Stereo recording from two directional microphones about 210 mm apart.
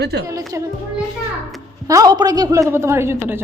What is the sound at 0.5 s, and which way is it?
Speech, 15° right (ahead or behind).